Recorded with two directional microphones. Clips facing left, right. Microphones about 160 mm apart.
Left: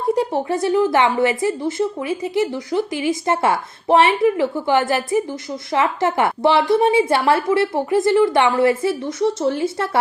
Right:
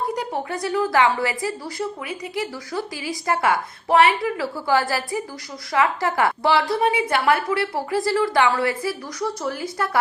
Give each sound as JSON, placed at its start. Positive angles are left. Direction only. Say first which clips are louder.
{"t": 0.2, "sound": "a woman's voice", "louder": "left 7 dB", "side_deg": 25}